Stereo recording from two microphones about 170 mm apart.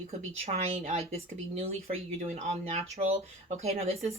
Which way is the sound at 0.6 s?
40° right (ahead or behind).